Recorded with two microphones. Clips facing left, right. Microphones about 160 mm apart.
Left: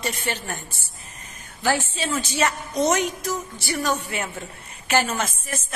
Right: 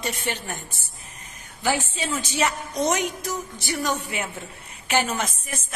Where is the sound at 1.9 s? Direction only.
15° right (ahead or behind).